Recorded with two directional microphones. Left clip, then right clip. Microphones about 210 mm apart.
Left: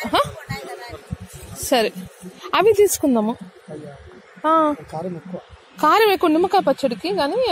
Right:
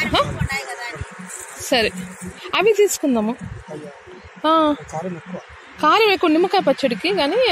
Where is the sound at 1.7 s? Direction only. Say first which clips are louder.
Even; 10° left (ahead or behind).